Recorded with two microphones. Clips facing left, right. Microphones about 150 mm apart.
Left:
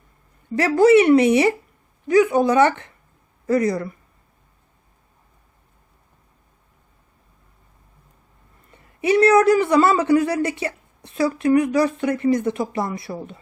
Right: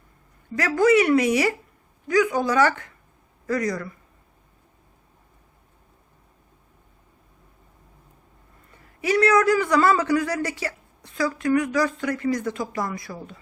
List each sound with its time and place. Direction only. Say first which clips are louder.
0.5 s a man's voice: left 5 dB; 30° left (ahead or behind)
8.7 s a man's voice: left 4 dB; 25° left (ahead or behind)